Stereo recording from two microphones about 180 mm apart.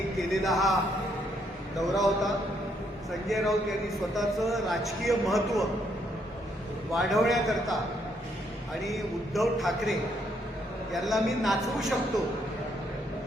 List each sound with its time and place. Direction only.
0.2 s a man's voice: centre (ahead or behind)
1.8 s a man's voice: centre (ahead or behind)
6.9 s a man's voice: centre (ahead or behind)
8.8 s a man's voice: centre (ahead or behind)